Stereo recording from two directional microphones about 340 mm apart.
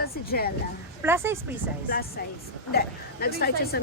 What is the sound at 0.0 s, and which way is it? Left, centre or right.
Speech, left.